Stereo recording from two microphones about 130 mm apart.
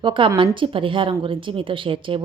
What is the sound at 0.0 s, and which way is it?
Speech, 40° right (ahead or behind).